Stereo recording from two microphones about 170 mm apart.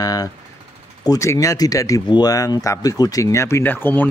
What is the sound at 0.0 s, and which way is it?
Speech, 20° left (ahead or behind).